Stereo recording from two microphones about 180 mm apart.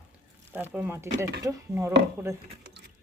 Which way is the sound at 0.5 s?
10° right (ahead or behind).